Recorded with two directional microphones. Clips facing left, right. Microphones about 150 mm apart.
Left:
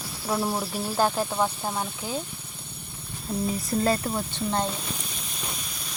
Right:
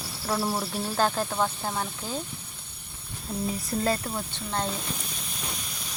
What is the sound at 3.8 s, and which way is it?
Speech, 30° left (ahead or behind).